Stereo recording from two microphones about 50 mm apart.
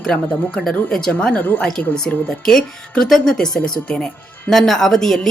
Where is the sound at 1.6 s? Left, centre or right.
Centre.